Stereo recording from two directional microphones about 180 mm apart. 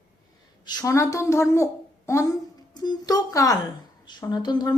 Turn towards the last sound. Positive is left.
turn(degrees=25)  # may be behind; listen again after turning